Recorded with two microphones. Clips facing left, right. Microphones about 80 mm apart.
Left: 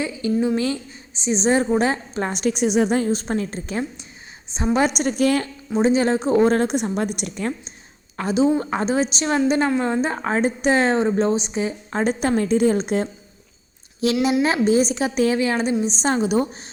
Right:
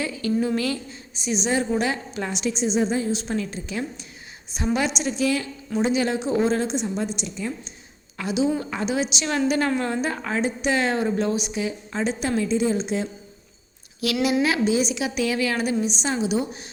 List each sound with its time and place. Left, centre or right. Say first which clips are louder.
0.0 s a woman's voice: left 3 dB; left
3.1 s a woman's voice: left 3 dB; left
4.5 s a woman's voice: left 3 dB; left
4.8 s a woman's voice: left 7 dB; left
5.7 s a woman's voice: left 4 dB; left
8.1 s a woman's voice: left 4 dB; left
9.3 s a woman's voice: left 3 dB; left
11.9 s a woman's voice: left 4 dB; left
14.0 s a woman's voice: left 3 dB; left